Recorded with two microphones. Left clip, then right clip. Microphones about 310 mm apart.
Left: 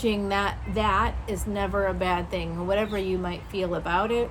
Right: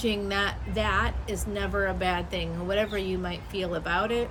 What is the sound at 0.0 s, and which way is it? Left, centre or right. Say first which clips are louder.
A woman's voice: left 2 dB; centre.